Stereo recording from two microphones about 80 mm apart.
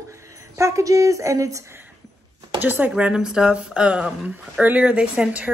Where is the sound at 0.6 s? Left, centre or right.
Right.